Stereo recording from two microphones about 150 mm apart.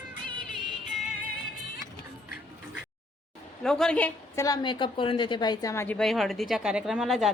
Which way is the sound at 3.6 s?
5° left (ahead or behind).